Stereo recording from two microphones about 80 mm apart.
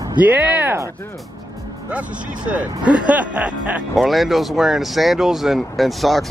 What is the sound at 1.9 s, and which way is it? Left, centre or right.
Speech, centre.